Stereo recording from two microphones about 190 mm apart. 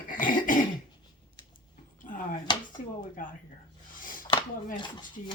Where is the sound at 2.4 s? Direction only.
25° left (ahead or behind).